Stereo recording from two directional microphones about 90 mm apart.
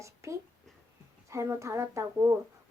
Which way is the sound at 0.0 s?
35° right (ahead or behind).